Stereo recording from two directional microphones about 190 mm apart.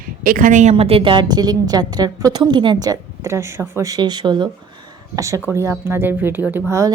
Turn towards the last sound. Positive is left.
turn(degrees=-15)  # may be behind; listen again after turning